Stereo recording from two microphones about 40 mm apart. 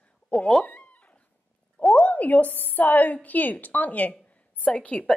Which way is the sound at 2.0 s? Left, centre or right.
Left.